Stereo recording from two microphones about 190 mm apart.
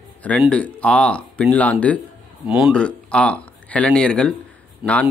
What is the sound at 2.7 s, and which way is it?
Speech, 5° left (ahead or behind).